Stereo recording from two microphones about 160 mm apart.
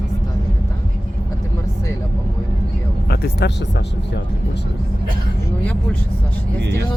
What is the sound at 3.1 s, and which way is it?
Speech, 85° left.